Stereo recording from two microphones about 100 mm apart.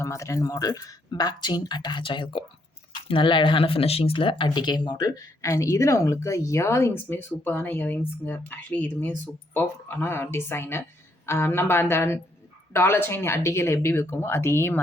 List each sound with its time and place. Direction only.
0.0 s speech: 30° left (ahead or behind); by 4.4 s 60° left (ahead or behind)
4.4 s speech: 45° left (ahead or behind); by 14.8 s 20° left (ahead or behind)